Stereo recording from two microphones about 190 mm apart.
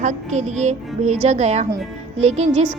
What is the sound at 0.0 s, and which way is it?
A woman's voice, 40° right (ahead or behind).